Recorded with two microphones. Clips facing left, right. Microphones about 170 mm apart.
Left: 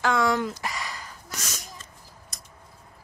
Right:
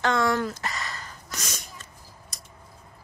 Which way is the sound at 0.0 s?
10° left (ahead or behind).